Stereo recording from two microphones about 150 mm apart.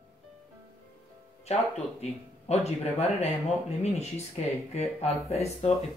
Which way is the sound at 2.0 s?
45° left (ahead or behind).